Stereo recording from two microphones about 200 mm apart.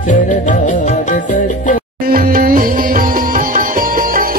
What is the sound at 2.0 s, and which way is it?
Music, 45° right (ahead or behind).